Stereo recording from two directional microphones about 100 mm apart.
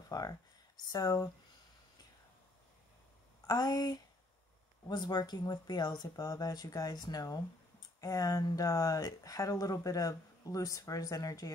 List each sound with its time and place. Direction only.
0.1 s speech: 40° left (ahead or behind)
3.4 s speech: 40° left (ahead or behind)